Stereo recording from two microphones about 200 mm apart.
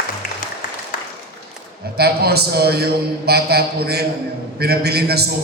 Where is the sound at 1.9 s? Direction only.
50° right (ahead or behind).